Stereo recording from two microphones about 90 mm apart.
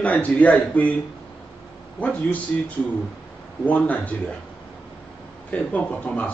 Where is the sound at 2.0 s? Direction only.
15° left (ahead or behind).